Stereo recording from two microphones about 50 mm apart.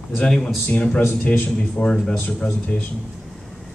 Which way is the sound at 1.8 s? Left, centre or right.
Centre.